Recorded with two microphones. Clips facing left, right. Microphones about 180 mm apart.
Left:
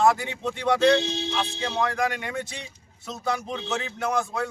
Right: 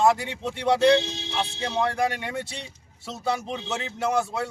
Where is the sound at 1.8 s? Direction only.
30° right (ahead or behind).